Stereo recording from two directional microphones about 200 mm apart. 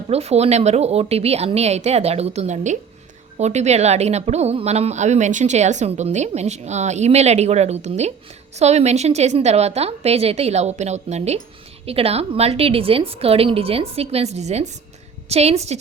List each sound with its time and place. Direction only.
0.1 s a woman's voice: 30° right (ahead or behind)